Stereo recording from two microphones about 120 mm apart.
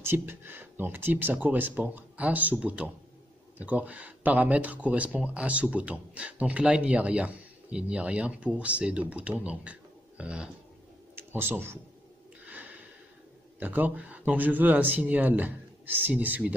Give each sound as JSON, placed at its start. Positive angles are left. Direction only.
{"t": 0.0, "sound": "speech", "side_deg": -20}
{"t": 12.4, "sound": "a sound", "side_deg": -10}
{"t": 13.6, "sound": "speech", "side_deg": -15}